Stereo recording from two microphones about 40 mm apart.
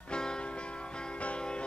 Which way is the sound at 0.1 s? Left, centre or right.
Centre.